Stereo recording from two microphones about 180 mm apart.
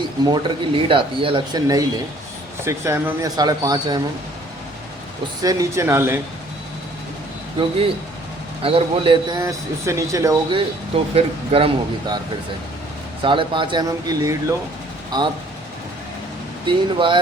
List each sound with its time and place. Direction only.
0.3 s a man's voice: 30° right (ahead or behind)
5.4 s speech: 20° right (ahead or behind)
8.6 s a man's voice: 30° right (ahead or behind)
10.9 s speech: 30° right (ahead or behind)
13.2 s a man's voice: 25° right (ahead or behind)
16.6 s a man's voice: 25° right (ahead or behind)